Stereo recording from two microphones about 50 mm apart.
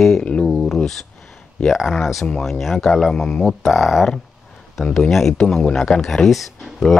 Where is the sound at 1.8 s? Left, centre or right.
Centre.